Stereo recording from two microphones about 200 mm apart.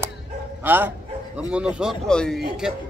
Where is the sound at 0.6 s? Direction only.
10° right (ahead or behind).